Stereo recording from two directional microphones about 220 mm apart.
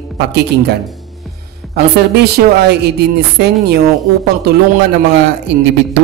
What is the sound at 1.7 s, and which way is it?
A woman's voice, 45° right (ahead or behind).